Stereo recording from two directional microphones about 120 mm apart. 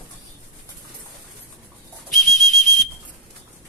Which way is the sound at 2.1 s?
Centre (ahead or behind).